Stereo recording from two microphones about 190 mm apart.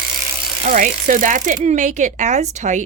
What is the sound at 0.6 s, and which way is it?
A woman's voice, 45° right (ahead or behind).